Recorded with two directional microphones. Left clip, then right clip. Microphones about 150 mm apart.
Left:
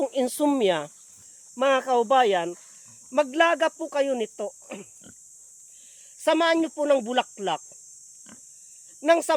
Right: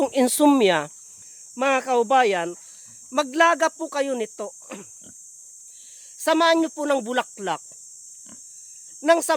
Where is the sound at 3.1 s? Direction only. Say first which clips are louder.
Right 2 dB; 25° right (ahead or behind).